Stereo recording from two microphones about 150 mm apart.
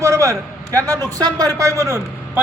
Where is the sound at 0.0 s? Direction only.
20° right (ahead or behind).